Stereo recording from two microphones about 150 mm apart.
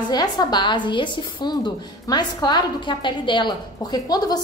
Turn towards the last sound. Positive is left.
turn(degrees=25)  # may be behind; listen again after turning